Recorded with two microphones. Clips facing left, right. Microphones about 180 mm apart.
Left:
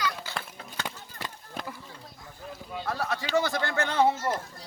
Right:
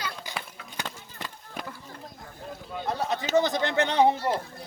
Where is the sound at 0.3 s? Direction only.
15° right (ahead or behind).